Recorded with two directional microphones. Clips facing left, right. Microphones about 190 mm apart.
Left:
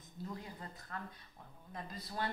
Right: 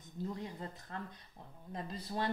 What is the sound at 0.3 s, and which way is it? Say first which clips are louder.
A woman's voice: right 4 dB; 25° right (ahead or behind).